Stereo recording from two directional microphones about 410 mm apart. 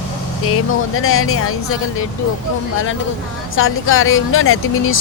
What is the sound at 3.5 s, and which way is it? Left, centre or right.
Speech, left.